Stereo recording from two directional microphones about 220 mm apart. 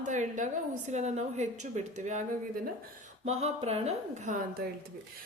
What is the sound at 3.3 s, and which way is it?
A woman's voice, 30° right (ahead or behind).